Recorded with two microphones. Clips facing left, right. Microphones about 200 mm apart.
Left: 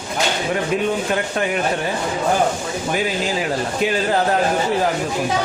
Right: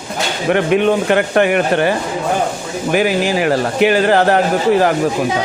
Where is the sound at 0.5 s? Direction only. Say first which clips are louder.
Right 10 dB; 70° right (ahead or behind).